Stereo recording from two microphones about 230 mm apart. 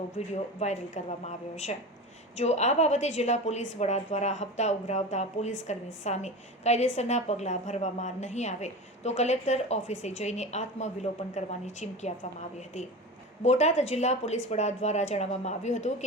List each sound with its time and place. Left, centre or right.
0.2 s a woman's voice: left